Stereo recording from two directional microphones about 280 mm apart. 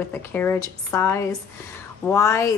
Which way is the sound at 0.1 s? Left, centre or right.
Centre.